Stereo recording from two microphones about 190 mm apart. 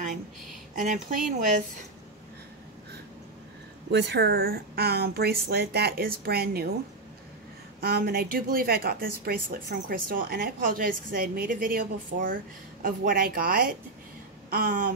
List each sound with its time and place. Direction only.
0.7 s speech: 45° right (ahead or behind)
3.9 s speech: 65° right (ahead or behind)
7.8 s speech: 55° right (ahead or behind)